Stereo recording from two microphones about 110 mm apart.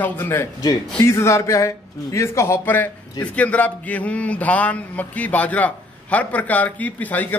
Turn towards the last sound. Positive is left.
turn(degrees=15)  # may be behind; listen again after turning